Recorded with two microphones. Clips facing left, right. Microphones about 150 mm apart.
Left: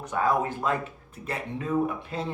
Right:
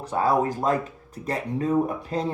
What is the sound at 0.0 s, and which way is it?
Speech, 35° right (ahead or behind).